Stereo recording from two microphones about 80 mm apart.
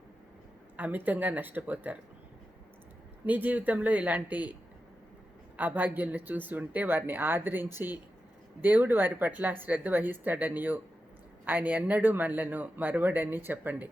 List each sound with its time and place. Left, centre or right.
0.8 s speech: right
3.2 s speech: right
5.5 s speech: right